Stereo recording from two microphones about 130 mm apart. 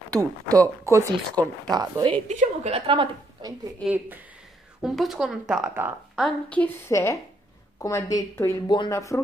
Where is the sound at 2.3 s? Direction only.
60° right (ahead or behind).